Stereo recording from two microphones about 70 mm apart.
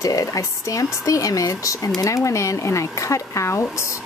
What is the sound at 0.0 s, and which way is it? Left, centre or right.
Speech, left.